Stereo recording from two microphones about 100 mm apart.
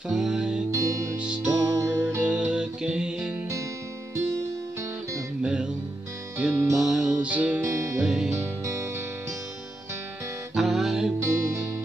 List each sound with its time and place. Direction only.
0.1 s music: 5° right (ahead or behind)
0.7 s music: 30° right (ahead or behind)
1.1 s music: 10° right (ahead or behind)
1.6 s music: 25° right (ahead or behind); by 3.3 s 10° right (ahead or behind)
5.4 s music: 10° right (ahead or behind)
6.3 s music: 25° right (ahead or behind)
6.7 s music: 5° right (ahead or behind)
7.6 s music: 30° right (ahead or behind)
8.0 s music: 5° right (ahead or behind)
8.6 s music: 30° right (ahead or behind)
10.5 s music: centre (ahead or behind)
11.1 s music: 30° right (ahead or behind)